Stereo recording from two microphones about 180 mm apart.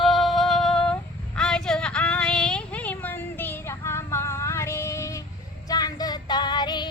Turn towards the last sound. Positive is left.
turn(degrees=25)  # may be behind; listen again after turning